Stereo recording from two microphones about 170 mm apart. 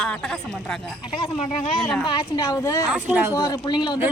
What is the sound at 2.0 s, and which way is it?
Speech, 25° left (ahead or behind).